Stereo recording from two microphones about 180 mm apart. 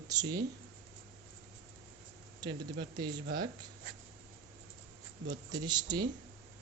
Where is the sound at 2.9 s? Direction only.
25° right (ahead or behind).